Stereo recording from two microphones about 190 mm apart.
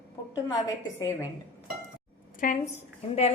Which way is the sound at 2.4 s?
45° left (ahead or behind).